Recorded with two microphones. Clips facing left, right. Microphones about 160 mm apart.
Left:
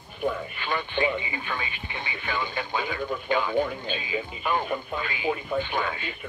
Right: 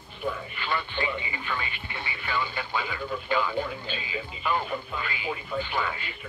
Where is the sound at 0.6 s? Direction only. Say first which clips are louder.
Left 3 dB; 20° left (ahead or behind).